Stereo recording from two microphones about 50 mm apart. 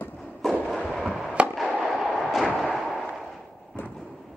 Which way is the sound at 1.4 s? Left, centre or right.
Right.